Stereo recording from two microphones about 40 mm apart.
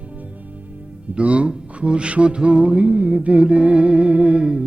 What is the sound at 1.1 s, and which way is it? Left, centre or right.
Mantra, right.